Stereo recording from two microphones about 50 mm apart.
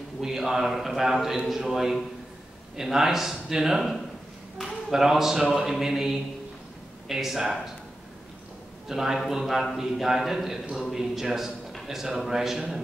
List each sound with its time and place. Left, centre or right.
0.2 s a man's voice: centre
4.9 s a man's voice: centre
8.8 s a man's voice: centre